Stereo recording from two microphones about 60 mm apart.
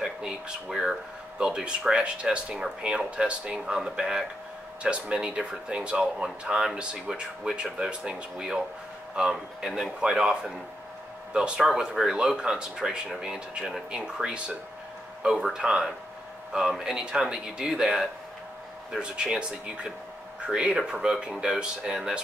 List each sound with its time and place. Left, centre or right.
0.7 s speech: centre
1.4 s speech: centre
15.5 s speech: centre